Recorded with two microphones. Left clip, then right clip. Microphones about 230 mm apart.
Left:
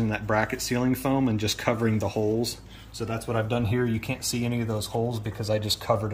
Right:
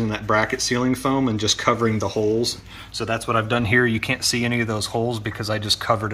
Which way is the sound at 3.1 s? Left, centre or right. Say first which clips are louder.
Right 7 dB; right.